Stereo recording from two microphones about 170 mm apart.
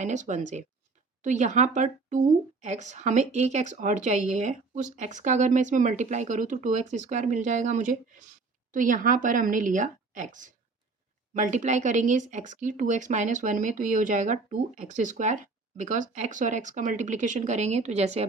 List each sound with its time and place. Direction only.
0.0 s speech: 45° right (ahead or behind)